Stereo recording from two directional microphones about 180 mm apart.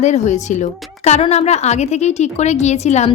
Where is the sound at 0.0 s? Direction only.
40° left (ahead or behind).